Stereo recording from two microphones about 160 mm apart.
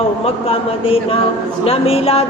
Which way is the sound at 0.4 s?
35° left (ahead or behind).